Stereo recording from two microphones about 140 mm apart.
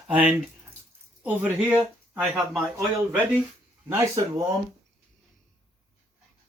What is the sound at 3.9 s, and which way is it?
Speech, 15° right (ahead or behind).